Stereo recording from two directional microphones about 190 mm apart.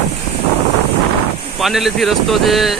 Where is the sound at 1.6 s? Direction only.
Centre (ahead or behind).